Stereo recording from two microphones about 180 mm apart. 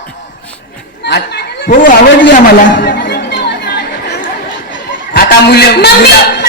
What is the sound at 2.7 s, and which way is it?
Chatter, 85° left.